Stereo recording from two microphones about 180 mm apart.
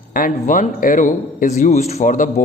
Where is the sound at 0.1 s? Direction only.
50° left (ahead or behind).